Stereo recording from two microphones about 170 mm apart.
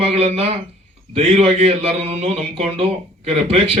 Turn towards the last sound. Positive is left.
turn(degrees=-35)  # may be behind; listen again after turning